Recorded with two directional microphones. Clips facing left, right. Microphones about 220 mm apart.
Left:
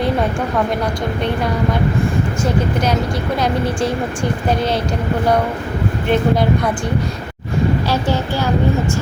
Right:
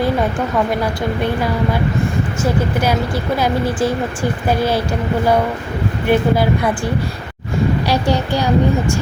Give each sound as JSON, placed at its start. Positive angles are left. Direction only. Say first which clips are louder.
{"t": 3.3, "sound": "speech", "louder": "right 1 dB", "side_deg": -5}
{"t": 6.1, "sound": "speech", "louder": "right 1 dB", "side_deg": -5}
{"t": 7.9, "sound": "speech", "louder": "right 2 dB", "side_deg": -15}